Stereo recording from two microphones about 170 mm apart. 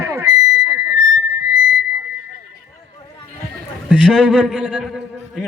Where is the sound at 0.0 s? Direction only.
15° right (ahead or behind).